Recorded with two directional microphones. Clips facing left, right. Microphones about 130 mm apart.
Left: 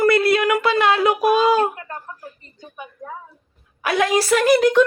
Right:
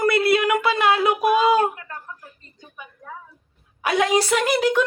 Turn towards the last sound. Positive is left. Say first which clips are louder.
# left 5 dB
turn(degrees=-10)  # may be behind; listen again after turning